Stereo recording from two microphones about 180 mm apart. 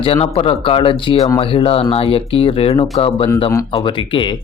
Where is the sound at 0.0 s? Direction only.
30° left (ahead or behind).